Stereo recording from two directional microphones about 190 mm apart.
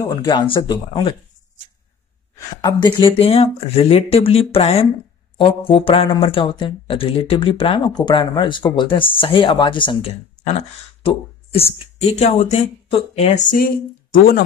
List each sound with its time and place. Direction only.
0.0 s speech: 20° left (ahead or behind)
2.3 s speech: 20° left (ahead or behind); by 14.4 s 50° left (ahead or behind)